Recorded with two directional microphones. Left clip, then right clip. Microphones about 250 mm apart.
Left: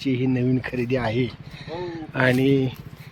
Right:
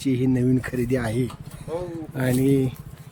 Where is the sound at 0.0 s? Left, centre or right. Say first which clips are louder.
Right 1 dB; centre.